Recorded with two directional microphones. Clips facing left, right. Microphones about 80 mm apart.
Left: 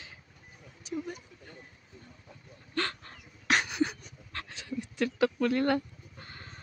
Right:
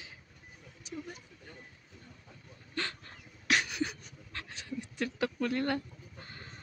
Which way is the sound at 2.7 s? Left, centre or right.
Left.